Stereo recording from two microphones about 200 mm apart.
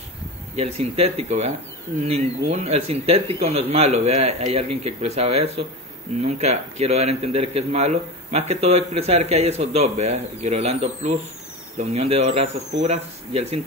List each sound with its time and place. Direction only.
0.6 s speech: 30° right (ahead or behind)